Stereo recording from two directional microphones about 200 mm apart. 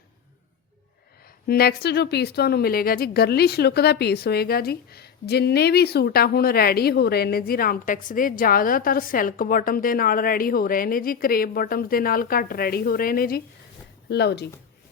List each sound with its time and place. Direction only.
1.2 s a woman's voice: 50° left (ahead or behind)